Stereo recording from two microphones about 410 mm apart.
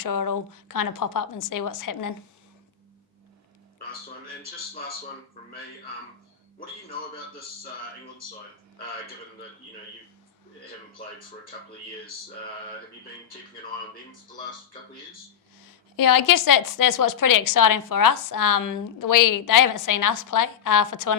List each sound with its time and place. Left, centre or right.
0.0 s a woman's voice: left
15.6 s a woman's voice: left